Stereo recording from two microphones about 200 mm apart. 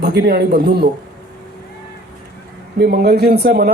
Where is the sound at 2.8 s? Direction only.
50° right (ahead or behind).